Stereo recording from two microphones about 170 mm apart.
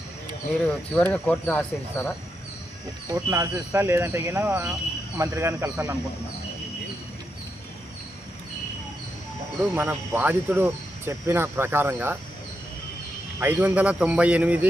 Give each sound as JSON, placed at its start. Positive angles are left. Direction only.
{"t": 0.6, "sound": "speech", "side_deg": 10}
{"t": 3.1, "sound": "speech", "side_deg": -20}
{"t": 9.7, "sound": "speech", "side_deg": -5}
{"t": 13.4, "sound": "speech", "side_deg": -10}